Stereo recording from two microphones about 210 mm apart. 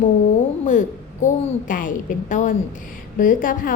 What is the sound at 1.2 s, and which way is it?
A woman's voice, 40° left (ahead or behind).